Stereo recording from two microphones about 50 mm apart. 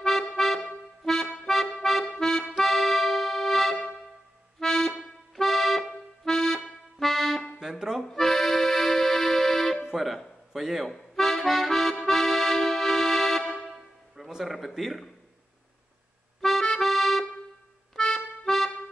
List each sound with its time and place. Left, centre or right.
0.0 s music: centre
1.8 s accordion: centre
9.9 s a sound: centre
10.9 s accordion: centre
13.4 s music: centre
14.1 s music: centre
14.8 s a man's voice: centre
16.3 s accordion: centre